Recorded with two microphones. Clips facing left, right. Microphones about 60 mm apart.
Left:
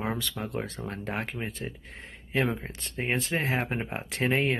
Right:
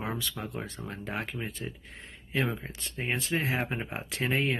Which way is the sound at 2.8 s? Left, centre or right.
Left.